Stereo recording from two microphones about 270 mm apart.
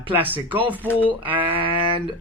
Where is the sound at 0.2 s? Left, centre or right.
Centre.